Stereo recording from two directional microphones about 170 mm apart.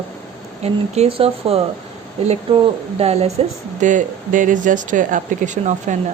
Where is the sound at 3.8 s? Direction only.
45° right (ahead or behind).